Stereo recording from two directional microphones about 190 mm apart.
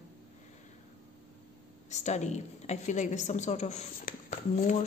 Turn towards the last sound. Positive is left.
turn(degrees=40)  # may be behind; listen again after turning